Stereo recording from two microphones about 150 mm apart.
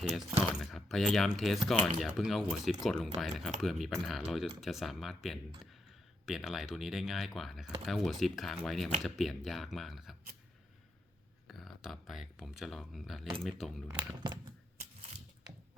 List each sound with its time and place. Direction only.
0.0 s speech: centre (ahead or behind)
11.4 s speech: centre (ahead or behind)
13.9 s speech: 30° right (ahead or behind)